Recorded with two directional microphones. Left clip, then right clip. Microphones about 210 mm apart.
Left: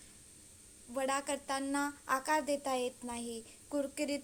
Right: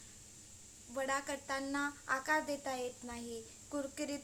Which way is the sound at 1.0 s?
20° left (ahead or behind).